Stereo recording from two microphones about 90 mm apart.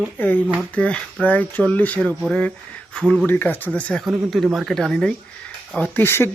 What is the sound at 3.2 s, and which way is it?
Speech, 20° left (ahead or behind).